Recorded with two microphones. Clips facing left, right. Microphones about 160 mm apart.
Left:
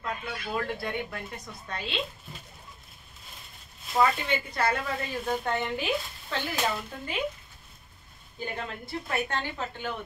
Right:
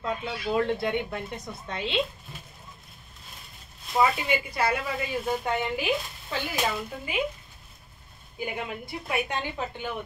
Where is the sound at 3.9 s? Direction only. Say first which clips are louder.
Right 1 dB; 10° right (ahead or behind).